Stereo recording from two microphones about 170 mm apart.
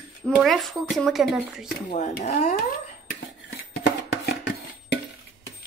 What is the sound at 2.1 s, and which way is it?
Speech, 60° left (ahead or behind).